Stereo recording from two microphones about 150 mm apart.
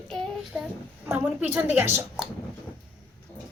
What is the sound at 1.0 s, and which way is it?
A woman's voice, 10° right (ahead or behind).